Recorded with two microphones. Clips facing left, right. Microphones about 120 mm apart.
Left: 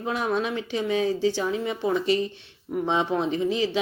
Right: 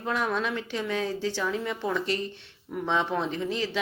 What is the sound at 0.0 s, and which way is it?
Speech, 15° left (ahead or behind).